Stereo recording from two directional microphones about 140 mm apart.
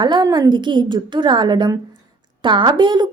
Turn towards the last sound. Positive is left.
turn(degrees=-35)  # may be behind; listen again after turning